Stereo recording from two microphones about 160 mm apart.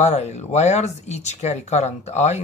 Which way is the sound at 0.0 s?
45° left (ahead or behind).